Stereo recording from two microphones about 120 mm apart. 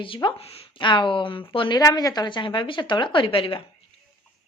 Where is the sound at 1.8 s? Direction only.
30° left (ahead or behind); by 3.6 s 45° left (ahead or behind).